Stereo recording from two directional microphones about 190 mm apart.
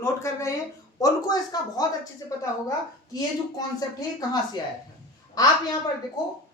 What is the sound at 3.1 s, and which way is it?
A woman's voice, 20° left (ahead or behind).